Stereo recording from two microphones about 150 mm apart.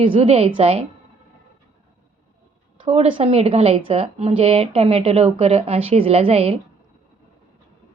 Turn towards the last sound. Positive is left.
turn(degrees=-40)  # may be behind; listen again after turning